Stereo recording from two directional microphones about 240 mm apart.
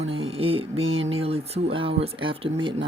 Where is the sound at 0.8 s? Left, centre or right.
Right.